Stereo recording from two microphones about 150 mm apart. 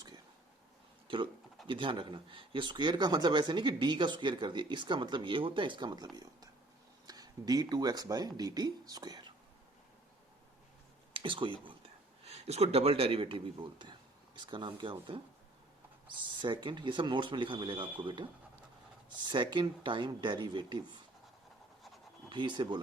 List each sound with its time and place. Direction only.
1.0 s speech: 35° right (ahead or behind)
7.1 s speech: 25° right (ahead or behind)
11.1 s speech: 35° right (ahead or behind)
16.4 s speech: 30° right (ahead or behind)
22.3 s speech: 30° right (ahead or behind)